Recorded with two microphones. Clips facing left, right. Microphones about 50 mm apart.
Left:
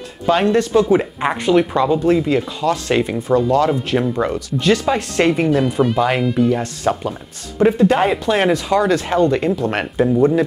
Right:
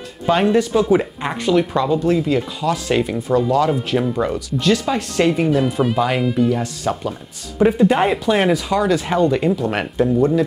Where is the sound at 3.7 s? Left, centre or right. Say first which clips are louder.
Left 1 dB; centre.